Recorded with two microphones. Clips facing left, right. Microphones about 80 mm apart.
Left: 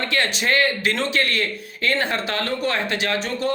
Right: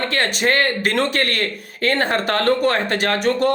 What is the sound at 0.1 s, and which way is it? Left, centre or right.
A man's voice, right.